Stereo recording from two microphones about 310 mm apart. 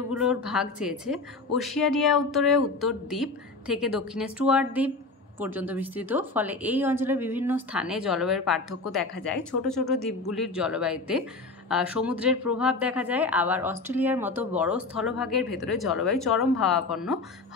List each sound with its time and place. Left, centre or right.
0.1 s a woman's voice: centre